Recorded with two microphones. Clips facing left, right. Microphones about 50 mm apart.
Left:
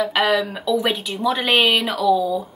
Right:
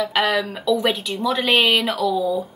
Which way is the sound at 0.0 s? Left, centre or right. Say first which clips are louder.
Left 1 dB; centre.